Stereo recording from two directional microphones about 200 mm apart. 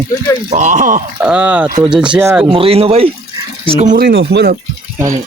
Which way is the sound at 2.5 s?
30° right (ahead or behind).